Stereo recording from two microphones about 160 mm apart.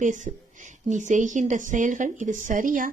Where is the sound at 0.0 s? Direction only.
50° right (ahead or behind).